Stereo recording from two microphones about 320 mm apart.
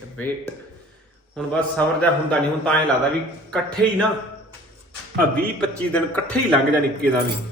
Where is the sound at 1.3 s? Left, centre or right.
Centre.